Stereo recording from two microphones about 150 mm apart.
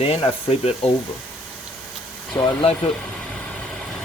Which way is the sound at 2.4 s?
25° left (ahead or behind).